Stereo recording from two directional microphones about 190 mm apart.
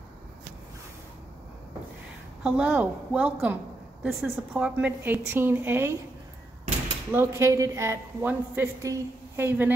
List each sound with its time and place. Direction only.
2.4 s a woman's voice: 5° right (ahead or behind)
7.1 s a woman's voice: 15° right (ahead or behind)